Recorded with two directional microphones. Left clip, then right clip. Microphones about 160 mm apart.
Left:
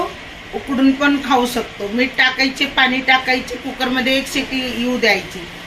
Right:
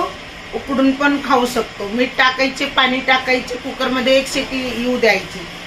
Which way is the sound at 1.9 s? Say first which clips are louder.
Even; 15° right (ahead or behind).